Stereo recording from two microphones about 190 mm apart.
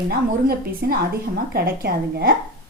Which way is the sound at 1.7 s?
55° right (ahead or behind).